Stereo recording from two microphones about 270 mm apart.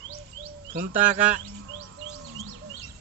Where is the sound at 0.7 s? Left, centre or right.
Right.